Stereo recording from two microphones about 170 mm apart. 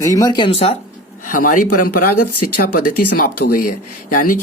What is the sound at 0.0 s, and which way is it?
Speech, 20° left (ahead or behind).